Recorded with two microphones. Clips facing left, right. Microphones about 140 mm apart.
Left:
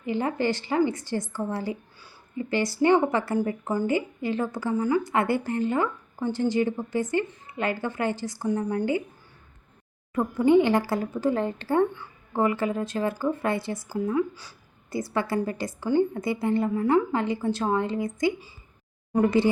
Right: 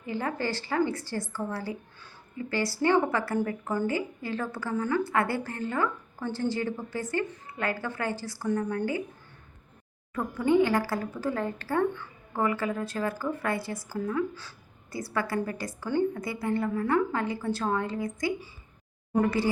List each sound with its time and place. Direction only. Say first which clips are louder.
0.0 s a woman's voice: left 5 dB; 20° left (ahead or behind)
10.2 s a woman's voice: left 4 dB; 20° left (ahead or behind)